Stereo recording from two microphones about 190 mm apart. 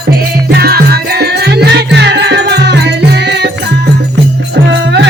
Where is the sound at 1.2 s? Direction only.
60° right (ahead or behind).